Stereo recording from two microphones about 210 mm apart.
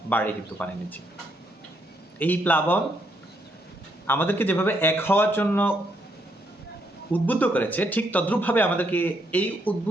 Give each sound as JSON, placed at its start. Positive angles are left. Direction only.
{"t": 0.1, "sound": "speech", "side_deg": 10}
{"t": 2.1, "sound": "speech", "side_deg": 10}
{"t": 4.0, "sound": "speech", "side_deg": 10}
{"t": 7.1, "sound": "speech", "side_deg": 10}